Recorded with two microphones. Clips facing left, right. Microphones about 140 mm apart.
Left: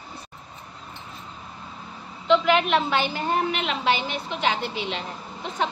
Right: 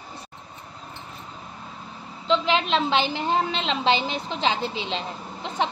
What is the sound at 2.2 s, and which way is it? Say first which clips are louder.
A woman's voice: left 3 dB; 25° right (ahead or behind).